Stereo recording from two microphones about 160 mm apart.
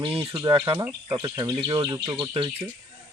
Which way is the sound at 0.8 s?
20° right (ahead or behind).